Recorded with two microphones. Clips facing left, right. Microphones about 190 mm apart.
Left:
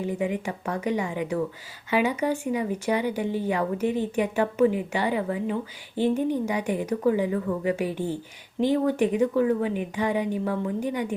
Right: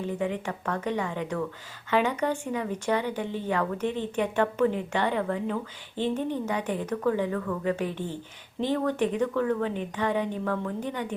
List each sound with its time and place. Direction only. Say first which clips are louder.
0.0 s speech: left 2 dB; 10° left (ahead or behind)